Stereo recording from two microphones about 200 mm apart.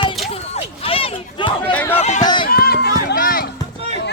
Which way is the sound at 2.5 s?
50° left (ahead or behind).